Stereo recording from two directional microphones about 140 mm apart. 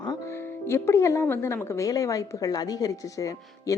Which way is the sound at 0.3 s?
20° left (ahead or behind).